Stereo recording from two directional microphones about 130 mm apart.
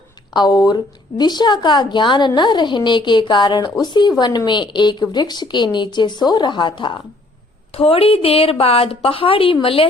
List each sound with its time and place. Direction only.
0.3 s a woman's voice: 30° left (ahead or behind)
7.7 s a woman's voice: 45° left (ahead or behind)